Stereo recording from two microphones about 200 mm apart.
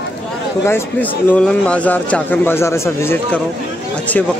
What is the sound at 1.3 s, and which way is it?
A man's voice, 5° left (ahead or behind).